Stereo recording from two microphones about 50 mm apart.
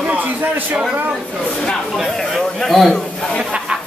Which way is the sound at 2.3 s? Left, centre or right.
Centre.